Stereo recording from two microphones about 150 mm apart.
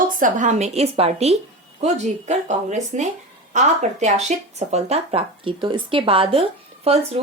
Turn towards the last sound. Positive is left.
turn(degrees=-40)  # may be behind; listen again after turning